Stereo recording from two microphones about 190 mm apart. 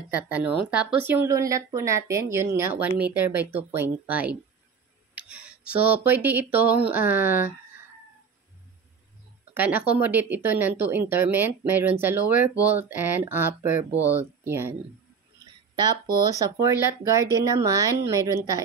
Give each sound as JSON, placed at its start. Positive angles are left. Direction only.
{"t": 0.1, "sound": "speech", "side_deg": -10}
{"t": 9.5, "sound": "speech", "side_deg": -10}
{"t": 16.2, "sound": "speech", "side_deg": -20}